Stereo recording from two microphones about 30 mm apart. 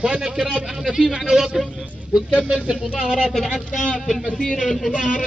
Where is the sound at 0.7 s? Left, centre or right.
Centre.